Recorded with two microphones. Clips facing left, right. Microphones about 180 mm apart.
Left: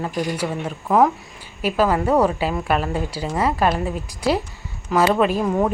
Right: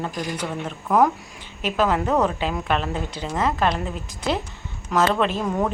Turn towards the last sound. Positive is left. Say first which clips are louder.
# left 4 dB
turn(degrees=10)  # may be behind; listen again after turning